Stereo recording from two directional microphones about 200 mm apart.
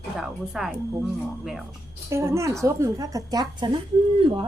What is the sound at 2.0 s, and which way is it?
A woman's voice, 15° right (ahead or behind).